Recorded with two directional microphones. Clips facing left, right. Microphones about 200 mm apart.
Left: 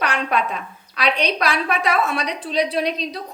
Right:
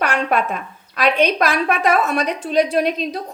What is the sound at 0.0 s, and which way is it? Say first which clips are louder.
A woman's voice: right 3 dB; 45° right (ahead or behind).